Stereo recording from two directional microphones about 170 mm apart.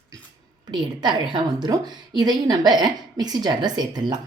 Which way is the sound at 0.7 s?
25° right (ahead or behind).